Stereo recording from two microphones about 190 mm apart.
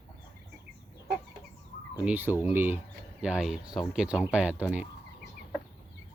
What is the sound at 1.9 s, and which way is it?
Chicken, 10° right (ahead or behind).